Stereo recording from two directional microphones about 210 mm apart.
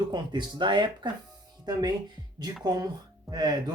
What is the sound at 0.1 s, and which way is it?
Speech, 20° right (ahead or behind).